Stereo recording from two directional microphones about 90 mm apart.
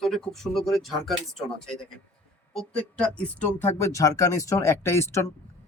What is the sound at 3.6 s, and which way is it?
Speech, 30° left (ahead or behind).